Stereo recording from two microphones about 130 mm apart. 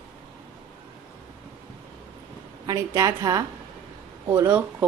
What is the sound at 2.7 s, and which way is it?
Speech, 25° right (ahead or behind).